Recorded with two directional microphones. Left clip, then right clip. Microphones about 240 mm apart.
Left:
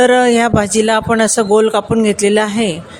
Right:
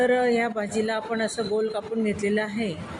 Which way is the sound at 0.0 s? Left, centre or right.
Left.